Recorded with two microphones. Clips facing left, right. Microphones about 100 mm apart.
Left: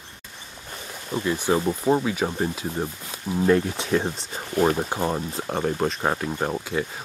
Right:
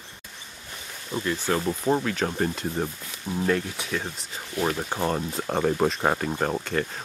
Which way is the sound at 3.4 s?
25° left (ahead or behind).